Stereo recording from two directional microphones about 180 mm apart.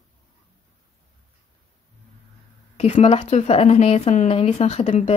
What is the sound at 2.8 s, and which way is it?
Speech, 35° left (ahead or behind).